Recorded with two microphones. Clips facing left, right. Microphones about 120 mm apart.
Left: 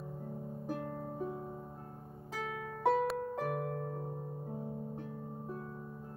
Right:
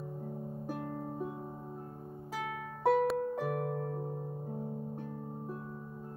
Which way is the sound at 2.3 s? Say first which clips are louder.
Right 1 dB; 5° right (ahead or behind).